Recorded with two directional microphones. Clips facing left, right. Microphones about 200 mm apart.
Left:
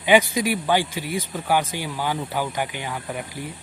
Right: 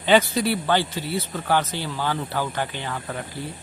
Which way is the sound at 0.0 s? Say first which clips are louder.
Left 1 dB; 10° left (ahead or behind).